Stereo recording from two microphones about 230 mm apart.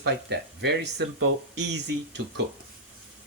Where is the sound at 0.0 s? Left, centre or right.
Right.